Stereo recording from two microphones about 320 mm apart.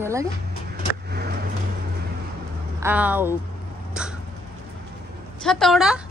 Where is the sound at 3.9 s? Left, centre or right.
Centre.